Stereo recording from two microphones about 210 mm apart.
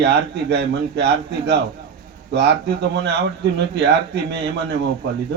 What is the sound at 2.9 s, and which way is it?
Speech, 55° right (ahead or behind).